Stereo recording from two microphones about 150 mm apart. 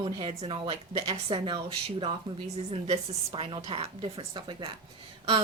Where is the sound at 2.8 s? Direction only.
45° right (ahead or behind).